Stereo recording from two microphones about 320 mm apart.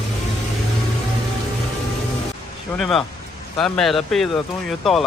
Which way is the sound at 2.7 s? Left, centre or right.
Centre.